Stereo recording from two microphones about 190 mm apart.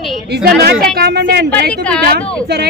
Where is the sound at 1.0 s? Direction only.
55° right (ahead or behind).